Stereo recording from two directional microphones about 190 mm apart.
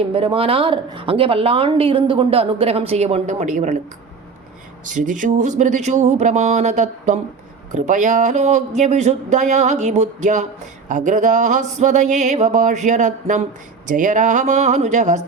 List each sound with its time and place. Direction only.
0.1 s speech: 30° right (ahead or behind)
4.9 s speech: 40° right (ahead or behind)